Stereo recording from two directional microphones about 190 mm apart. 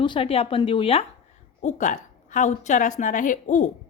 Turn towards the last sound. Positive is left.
turn(degrees=40)  # may be behind; listen again after turning